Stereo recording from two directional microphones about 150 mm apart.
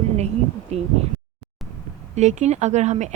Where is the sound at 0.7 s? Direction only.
45° right (ahead or behind).